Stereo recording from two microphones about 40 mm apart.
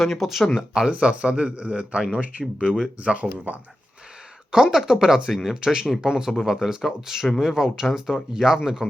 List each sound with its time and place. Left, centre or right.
0.0 s speech: centre
0.5 s speech: centre
0.9 s speech: right
3.0 s speech: right
4.5 s speech: centre
5.5 s speech: centre
5.8 s speech: centre